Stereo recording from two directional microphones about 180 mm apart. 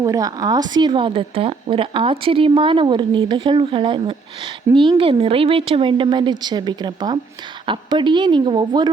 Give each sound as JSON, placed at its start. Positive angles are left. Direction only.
{"t": 0.0, "sound": "speech", "side_deg": -20}